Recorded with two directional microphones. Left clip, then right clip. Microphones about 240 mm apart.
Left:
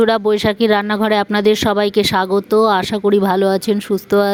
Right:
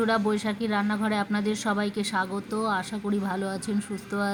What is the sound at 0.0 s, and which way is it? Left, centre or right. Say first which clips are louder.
Speech: left 12 dB; left.